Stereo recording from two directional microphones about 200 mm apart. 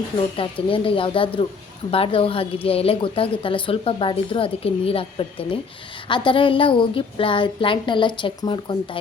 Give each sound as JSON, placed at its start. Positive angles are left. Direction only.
{"t": 0.3, "sound": "a woman's voice", "side_deg": 25}